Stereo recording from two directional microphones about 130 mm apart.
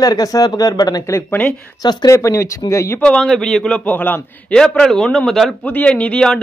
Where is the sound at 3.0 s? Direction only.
5° left (ahead or behind).